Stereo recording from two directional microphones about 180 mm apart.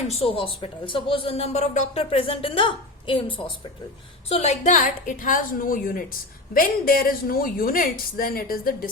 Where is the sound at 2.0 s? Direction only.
30° left (ahead or behind).